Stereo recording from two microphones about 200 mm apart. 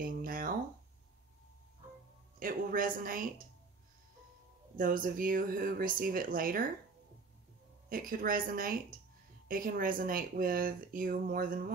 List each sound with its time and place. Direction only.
0.0 s a sound: 45° right (ahead or behind)
2.3 s speech: 45° right (ahead or behind)
4.7 s speech: 45° right (ahead or behind)
7.9 s speech: 45° right (ahead or behind)